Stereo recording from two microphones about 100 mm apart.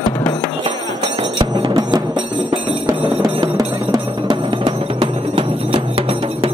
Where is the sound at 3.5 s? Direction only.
40° right (ahead or behind).